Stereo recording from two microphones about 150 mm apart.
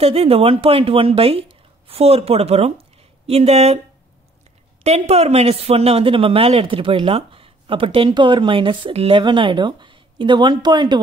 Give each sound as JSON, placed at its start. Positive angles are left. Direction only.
{"t": 0.0, "sound": "speech", "side_deg": -40}
{"t": 4.8, "sound": "speech", "side_deg": -45}